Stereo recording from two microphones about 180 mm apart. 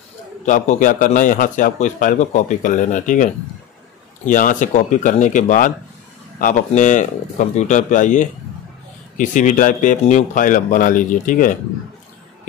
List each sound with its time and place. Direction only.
0.5 s a man's voice: 45° left (ahead or behind)
4.3 s a man's voice: 45° left (ahead or behind)